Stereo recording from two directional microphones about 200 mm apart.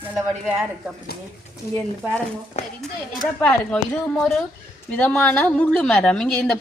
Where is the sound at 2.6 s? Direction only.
30° left (ahead or behind).